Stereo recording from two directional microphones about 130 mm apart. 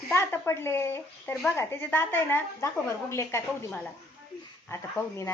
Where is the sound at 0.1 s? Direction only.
20° left (ahead or behind).